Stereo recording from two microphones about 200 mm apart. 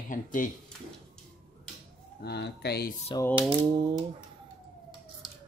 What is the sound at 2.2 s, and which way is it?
Speech, 55° left (ahead or behind).